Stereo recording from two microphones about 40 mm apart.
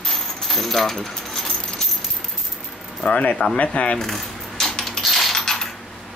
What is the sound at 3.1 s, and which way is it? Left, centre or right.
Mechanisms, left.